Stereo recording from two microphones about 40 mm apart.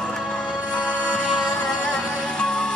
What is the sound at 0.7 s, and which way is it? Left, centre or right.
Music, left.